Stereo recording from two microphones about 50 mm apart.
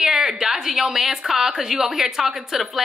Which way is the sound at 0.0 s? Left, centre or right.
Centre.